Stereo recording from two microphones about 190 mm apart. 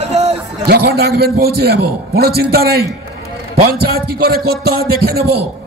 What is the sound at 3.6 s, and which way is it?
Music, 55° right (ahead or behind).